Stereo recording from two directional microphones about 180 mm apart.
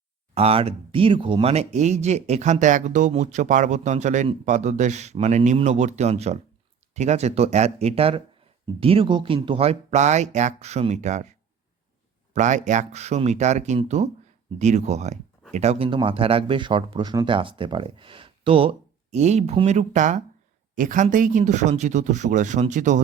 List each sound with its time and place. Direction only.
0.3 s speech: 30° right (ahead or behind)